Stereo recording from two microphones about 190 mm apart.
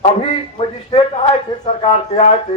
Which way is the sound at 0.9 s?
30° left (ahead or behind).